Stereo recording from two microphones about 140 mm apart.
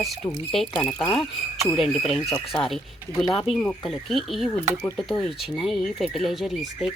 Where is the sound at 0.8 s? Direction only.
10° left (ahead or behind).